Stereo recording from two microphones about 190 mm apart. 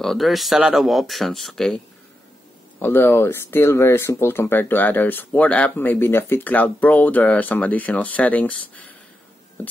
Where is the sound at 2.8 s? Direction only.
10° left (ahead or behind).